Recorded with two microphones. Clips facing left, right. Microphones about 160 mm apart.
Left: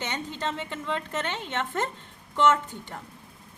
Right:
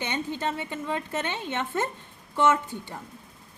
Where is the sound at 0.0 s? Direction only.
15° right (ahead or behind).